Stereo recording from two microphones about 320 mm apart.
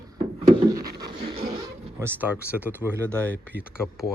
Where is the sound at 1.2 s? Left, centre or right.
Centre.